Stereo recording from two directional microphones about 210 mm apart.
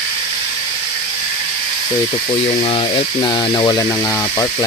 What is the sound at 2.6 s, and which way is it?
Speech, 25° left (ahead or behind).